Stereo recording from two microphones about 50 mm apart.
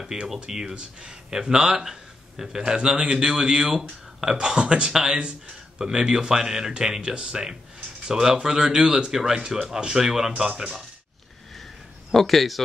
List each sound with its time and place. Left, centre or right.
0.3 s speech: centre
10.5 s speech: right
12.1 s speech: centre